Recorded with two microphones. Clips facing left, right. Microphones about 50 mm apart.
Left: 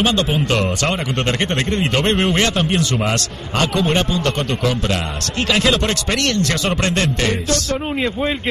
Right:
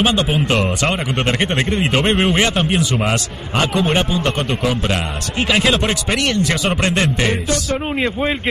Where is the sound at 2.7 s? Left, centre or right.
Centre.